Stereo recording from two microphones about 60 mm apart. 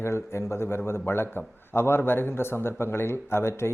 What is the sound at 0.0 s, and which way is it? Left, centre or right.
A man's voice, left.